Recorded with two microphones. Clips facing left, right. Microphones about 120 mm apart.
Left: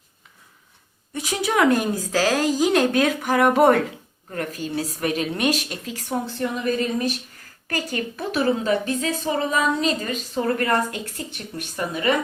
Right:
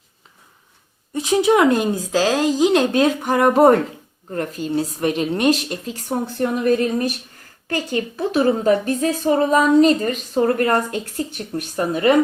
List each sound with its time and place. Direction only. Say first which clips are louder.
1.1 s speech: right 7 dB; 25° right (ahead or behind)
6.2 s a woman's voice: right 9 dB; 50° right (ahead or behind)
7.7 s speech: right 4 dB; 25° right (ahead or behind)
8.1 s a woman's voice: right 4 dB; 35° right (ahead or behind)